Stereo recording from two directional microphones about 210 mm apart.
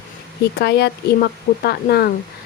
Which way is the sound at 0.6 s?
50° left (ahead or behind).